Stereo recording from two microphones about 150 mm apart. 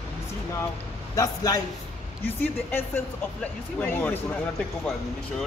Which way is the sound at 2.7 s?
10° left (ahead or behind).